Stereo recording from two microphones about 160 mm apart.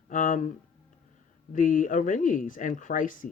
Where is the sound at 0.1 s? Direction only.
55° left (ahead or behind).